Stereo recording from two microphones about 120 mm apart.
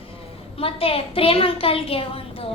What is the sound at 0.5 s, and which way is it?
A child's voice, 50° left (ahead or behind).